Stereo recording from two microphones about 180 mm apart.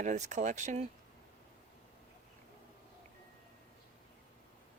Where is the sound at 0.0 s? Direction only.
45° right (ahead or behind).